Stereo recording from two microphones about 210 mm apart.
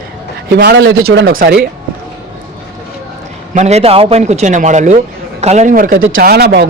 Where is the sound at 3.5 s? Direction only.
30° right (ahead or behind).